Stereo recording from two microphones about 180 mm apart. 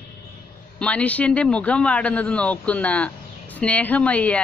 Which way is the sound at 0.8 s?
5° left (ahead or behind).